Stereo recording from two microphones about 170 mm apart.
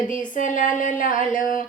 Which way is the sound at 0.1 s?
50° left (ahead or behind).